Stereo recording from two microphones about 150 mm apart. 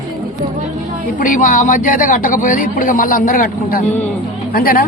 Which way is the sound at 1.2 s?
60° left (ahead or behind).